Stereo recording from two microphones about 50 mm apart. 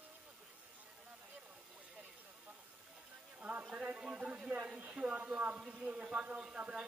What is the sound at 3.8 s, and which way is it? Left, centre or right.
Speech, centre.